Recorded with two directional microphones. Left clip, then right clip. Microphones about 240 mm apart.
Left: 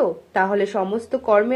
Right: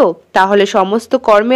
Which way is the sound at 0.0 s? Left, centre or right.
Right.